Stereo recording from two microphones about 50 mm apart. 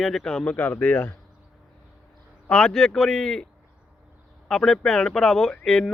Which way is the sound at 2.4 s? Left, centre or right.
Centre.